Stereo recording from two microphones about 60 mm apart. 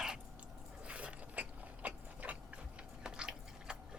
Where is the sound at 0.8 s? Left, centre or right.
Right.